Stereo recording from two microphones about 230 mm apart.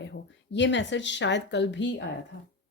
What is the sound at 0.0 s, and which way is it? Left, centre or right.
Speech, left.